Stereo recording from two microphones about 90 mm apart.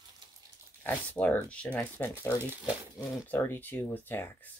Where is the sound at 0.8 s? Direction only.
20° left (ahead or behind).